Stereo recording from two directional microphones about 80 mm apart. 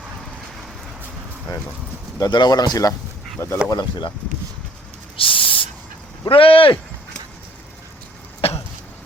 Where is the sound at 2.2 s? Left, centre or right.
Left.